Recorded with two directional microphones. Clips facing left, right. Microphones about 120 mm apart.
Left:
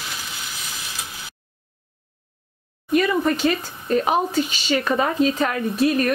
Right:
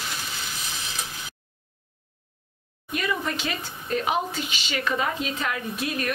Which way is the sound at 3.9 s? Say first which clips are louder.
Left 6 dB; 40° left (ahead or behind).